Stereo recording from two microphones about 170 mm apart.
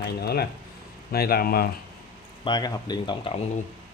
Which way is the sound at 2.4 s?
25° left (ahead or behind).